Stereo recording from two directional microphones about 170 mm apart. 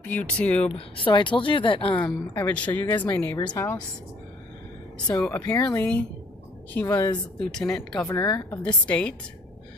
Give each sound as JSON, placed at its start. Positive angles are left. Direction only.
{"t": 0.0, "sound": "speech", "side_deg": 10}
{"t": 0.7, "sound": "a woman's voice", "side_deg": 30}
{"t": 2.0, "sound": "speech", "side_deg": 10}
{"t": 3.3, "sound": "a woman's voice", "side_deg": 25}
{"t": 5.2, "sound": "a woman's voice", "side_deg": 10}
{"t": 8.2, "sound": "a woman's voice", "side_deg": 20}
{"t": 8.8, "sound": "speech", "side_deg": 5}